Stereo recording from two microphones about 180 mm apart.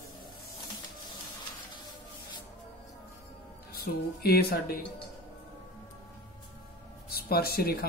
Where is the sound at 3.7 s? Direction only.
60° left (ahead or behind).